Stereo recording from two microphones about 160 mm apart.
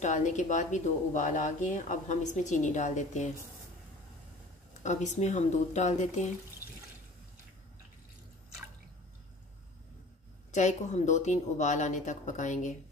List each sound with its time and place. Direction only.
0.0 s speech: 50° left (ahead or behind)
4.8 s speech: 50° left (ahead or behind)
10.5 s speech: 50° left (ahead or behind)